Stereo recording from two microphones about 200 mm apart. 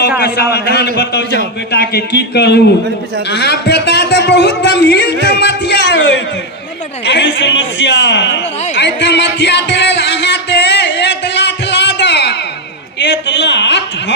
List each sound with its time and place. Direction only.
0.2 s a man's voice: 55° left (ahead or behind)
5.2 s music: 55° left (ahead or behind)
7.0 s a man's voice: 60° left (ahead or behind)
8.7 s music: 60° left (ahead or behind)
13.0 s a sound: 60° left (ahead or behind)